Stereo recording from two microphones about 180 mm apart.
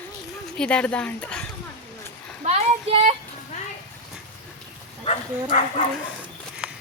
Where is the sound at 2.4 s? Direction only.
35° right (ahead or behind).